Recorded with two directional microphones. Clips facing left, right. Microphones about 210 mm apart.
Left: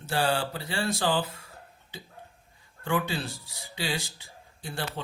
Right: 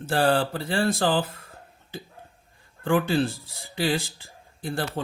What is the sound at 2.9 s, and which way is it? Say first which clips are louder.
Speech: right 7 dB; 50° right (ahead or behind).